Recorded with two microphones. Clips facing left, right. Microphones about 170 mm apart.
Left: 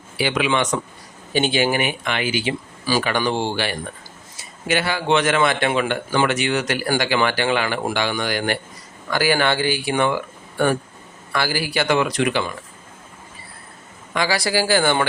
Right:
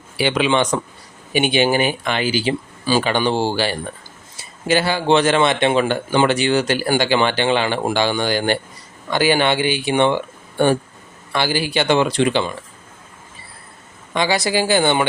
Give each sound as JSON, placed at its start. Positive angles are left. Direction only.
{"t": 0.2, "sound": "speech", "side_deg": -30}
{"t": 1.3, "sound": "speech", "side_deg": -15}
{"t": 14.1, "sound": "speech", "side_deg": -25}